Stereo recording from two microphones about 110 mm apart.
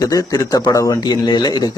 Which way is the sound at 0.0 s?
35° left (ahead or behind).